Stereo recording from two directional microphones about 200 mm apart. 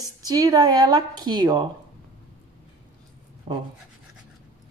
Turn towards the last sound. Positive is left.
turn(degrees=-25)  # may be behind; listen again after turning